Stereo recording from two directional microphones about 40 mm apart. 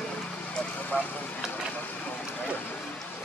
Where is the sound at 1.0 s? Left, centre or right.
Left.